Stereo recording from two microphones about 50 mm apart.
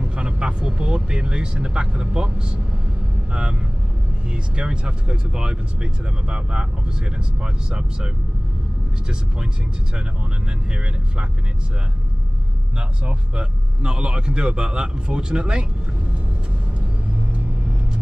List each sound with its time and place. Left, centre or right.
0.0 s speech: right
12.7 s speech: right